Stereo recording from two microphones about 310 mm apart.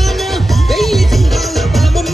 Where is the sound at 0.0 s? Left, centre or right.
Centre.